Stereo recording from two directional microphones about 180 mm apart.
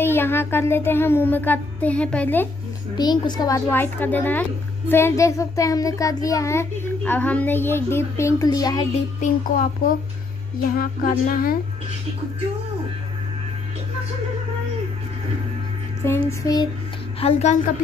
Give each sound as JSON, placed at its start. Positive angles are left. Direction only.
{"t": 0.0, "sound": "a child's voice", "side_deg": 10}
{"t": 3.0, "sound": "a child's voice", "side_deg": 25}
{"t": 9.2, "sound": "a child's voice", "side_deg": 45}
{"t": 16.0, "sound": "a child's voice", "side_deg": 15}
{"t": 17.2, "sound": "a woman's voice", "side_deg": 40}